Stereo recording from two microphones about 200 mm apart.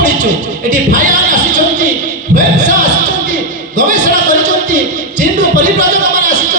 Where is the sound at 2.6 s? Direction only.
40° right (ahead or behind).